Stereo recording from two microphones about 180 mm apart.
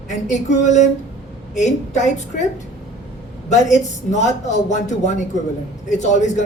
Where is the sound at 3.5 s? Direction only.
40° left (ahead or behind).